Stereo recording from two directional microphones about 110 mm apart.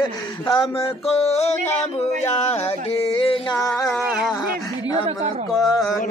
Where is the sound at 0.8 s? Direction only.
75° left (ahead or behind).